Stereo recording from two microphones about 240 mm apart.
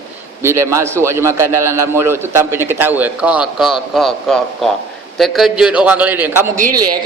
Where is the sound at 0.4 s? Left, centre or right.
Centre.